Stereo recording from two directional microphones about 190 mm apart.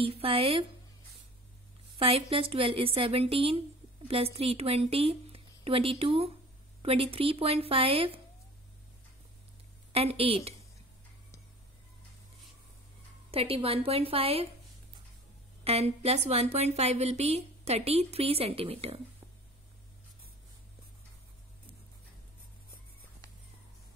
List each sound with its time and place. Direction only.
0.0 s a woman's voice: 30° right (ahead or behind)
2.0 s a woman's voice: 30° right (ahead or behind)
9.9 s speech: 30° right (ahead or behind)
13.3 s speech: 30° right (ahead or behind)
15.6 s speech: 35° right (ahead or behind)